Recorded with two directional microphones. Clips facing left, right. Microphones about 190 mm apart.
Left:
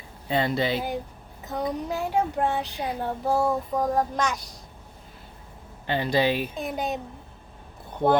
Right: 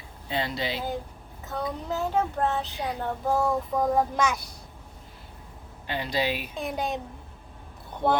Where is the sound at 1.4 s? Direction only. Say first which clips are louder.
Left 3 dB; 20° left (ahead or behind); by 4.3 s 5° right (ahead or behind).